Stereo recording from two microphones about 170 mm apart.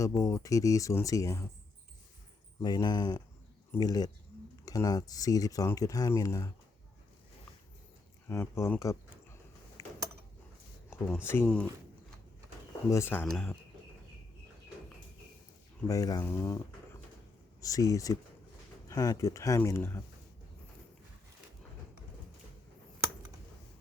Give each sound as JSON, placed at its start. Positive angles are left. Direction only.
{"t": 0.0, "sound": "speech", "side_deg": 20}
{"t": 2.6, "sound": "speech", "side_deg": 25}
{"t": 8.3, "sound": "a sound", "side_deg": 15}
{"t": 10.8, "sound": "a sound", "side_deg": 15}
{"t": 11.1, "sound": "speech", "side_deg": 10}
{"t": 12.9, "sound": "speech", "side_deg": 15}
{"t": 15.9, "sound": "speech", "side_deg": 20}
{"t": 16.2, "sound": "a sound", "side_deg": 15}
{"t": 17.6, "sound": "speech", "side_deg": 20}